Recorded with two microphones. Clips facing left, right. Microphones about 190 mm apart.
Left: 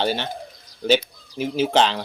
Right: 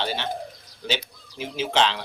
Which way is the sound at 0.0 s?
45° left (ahead or behind).